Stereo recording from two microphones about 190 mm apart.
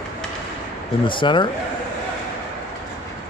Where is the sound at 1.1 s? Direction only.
25° left (ahead or behind).